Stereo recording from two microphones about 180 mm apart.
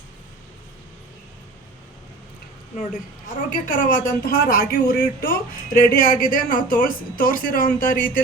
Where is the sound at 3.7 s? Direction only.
50° left (ahead or behind).